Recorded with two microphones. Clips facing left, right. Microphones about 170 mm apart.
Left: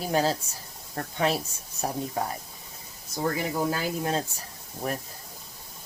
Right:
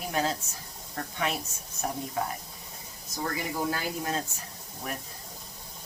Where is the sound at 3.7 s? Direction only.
30° left (ahead or behind).